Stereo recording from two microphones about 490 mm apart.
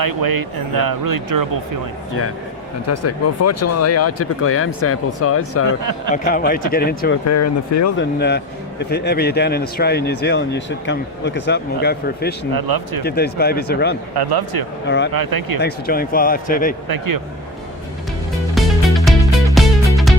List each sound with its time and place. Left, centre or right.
0.0 s speech: right
2.8 s a man's voice: left
6.1 s speech: centre
7.3 s speech: left
7.9 s a man's voice: centre
12.5 s speech: right
13.1 s a man's voice: centre
14.1 s speech: right
14.8 s a man's voice: left
15.1 s speech: right
15.6 s speech: centre
18.5 s music: centre